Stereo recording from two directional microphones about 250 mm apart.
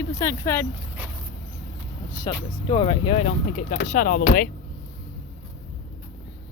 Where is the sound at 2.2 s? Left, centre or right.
Centre; by 4.5 s left.